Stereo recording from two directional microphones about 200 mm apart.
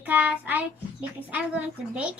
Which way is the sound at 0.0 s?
10° right (ahead or behind).